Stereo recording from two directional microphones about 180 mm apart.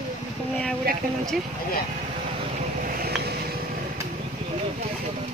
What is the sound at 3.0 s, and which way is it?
Vehicle, 60° right (ahead or behind).